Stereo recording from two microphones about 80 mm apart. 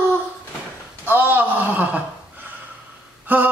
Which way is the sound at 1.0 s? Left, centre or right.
Right.